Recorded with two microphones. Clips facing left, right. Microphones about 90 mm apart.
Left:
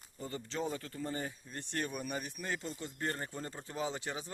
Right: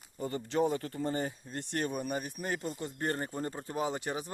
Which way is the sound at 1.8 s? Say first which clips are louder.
Right 5 dB; 40° right (ahead or behind).